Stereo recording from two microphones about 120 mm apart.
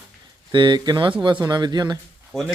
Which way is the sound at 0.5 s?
40° right (ahead or behind).